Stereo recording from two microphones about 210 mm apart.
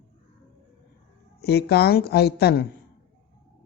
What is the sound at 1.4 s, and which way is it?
A woman's voice, 50° left (ahead or behind).